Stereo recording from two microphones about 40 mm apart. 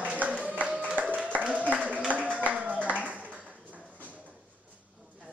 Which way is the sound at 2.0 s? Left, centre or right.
Right.